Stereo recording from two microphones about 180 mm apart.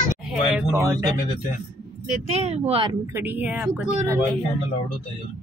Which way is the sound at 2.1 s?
40° right (ahead or behind).